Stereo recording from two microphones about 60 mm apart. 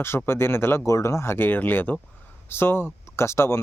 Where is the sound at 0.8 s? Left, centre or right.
Left.